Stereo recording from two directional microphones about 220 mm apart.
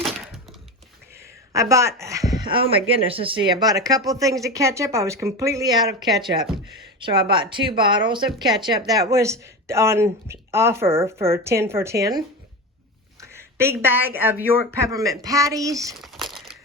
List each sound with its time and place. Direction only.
0.0 s a sound: centre (ahead or behind)
1.5 s speech: 15° right (ahead or behind)
6.4 s speech: centre (ahead or behind)
7.0 s speech: 20° right (ahead or behind)
13.2 s speech: 10° right (ahead or behind)
16.0 s crumpling: centre (ahead or behind)